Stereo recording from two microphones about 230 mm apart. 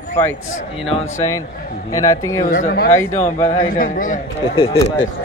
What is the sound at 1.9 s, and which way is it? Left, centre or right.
Speech, centre.